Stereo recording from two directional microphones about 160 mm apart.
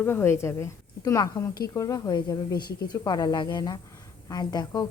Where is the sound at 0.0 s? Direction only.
15° left (ahead or behind).